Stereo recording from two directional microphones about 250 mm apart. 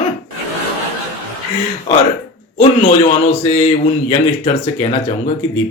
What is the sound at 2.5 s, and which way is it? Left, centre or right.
Speech, left.